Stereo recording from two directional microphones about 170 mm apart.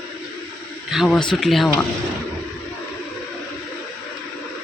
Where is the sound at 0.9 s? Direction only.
Centre (ahead or behind).